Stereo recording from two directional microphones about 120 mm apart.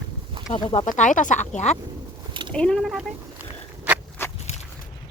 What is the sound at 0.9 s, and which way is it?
Speech, 90° left.